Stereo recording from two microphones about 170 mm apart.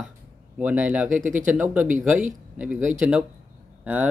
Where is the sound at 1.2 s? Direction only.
50° right (ahead or behind).